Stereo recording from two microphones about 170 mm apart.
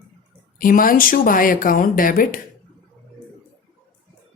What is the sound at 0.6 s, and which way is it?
Speech, 55° left (ahead or behind).